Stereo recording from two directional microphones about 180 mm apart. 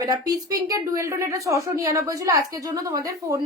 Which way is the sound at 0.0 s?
20° right (ahead or behind).